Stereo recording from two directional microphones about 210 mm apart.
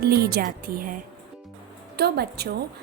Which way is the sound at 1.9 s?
50° right (ahead or behind).